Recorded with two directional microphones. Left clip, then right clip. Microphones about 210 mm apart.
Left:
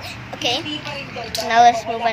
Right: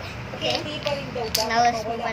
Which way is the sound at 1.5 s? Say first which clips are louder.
Left 9 dB; 5° left (ahead or behind).